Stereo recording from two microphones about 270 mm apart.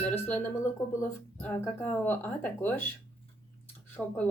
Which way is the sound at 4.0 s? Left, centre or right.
Centre.